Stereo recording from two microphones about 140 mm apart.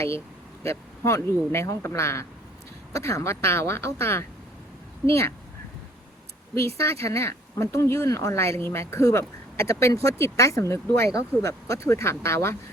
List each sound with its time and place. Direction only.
0.6 s speech: 20° left (ahead or behind)
6.5 s speech: 20° left (ahead or behind)